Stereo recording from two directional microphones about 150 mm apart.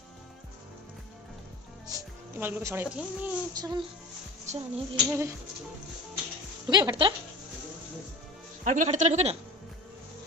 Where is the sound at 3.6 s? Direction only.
30° right (ahead or behind).